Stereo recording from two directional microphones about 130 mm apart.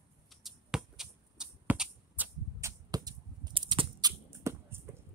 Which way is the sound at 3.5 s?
40° right (ahead or behind).